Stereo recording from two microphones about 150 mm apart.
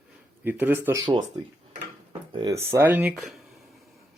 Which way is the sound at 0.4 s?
10° right (ahead or behind).